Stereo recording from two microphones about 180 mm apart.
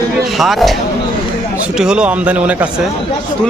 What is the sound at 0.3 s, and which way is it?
Speech, centre (ahead or behind).